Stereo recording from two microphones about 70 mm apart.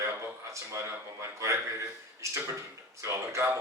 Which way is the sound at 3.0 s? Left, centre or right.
Right.